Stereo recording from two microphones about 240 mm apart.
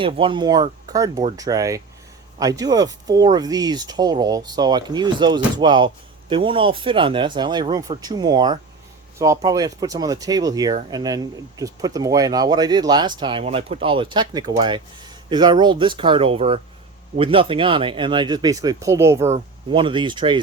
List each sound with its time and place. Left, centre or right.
0.0 s speech: right
19.3 s speech: right